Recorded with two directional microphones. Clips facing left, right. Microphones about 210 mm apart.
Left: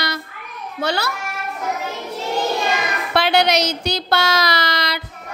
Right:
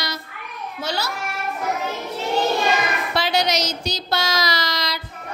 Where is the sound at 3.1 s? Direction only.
60° left (ahead or behind).